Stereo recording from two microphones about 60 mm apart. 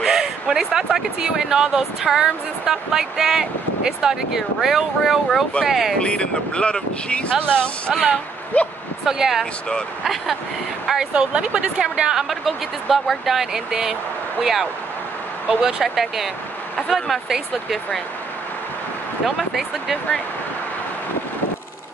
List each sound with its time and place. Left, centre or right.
0.0 s speech: centre
5.9 s speech: centre
9.0 s speech: centre
9.4 s speech: centre
10.9 s speech: centre
19.2 s speech: centre